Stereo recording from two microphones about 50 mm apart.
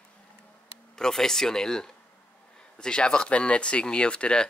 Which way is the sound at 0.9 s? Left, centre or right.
Centre.